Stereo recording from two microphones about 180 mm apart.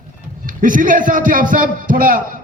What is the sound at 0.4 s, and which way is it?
A man's voice, 50° right (ahead or behind).